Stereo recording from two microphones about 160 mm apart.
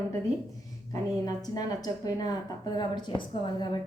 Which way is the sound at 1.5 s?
25° left (ahead or behind).